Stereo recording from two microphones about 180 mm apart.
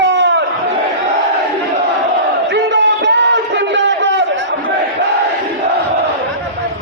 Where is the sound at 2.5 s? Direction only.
85° right.